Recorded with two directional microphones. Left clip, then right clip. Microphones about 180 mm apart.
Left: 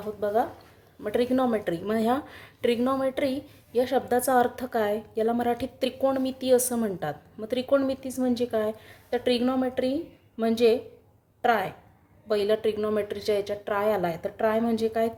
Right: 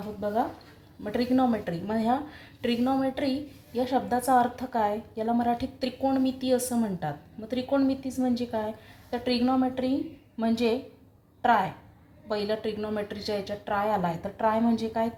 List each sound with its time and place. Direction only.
1.0 s a woman's voice: 35° left (ahead or behind)